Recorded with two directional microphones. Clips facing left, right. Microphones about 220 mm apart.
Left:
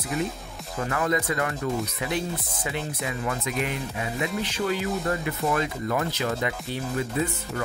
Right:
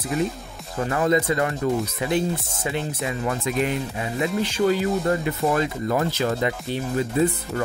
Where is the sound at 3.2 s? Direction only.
35° right (ahead or behind).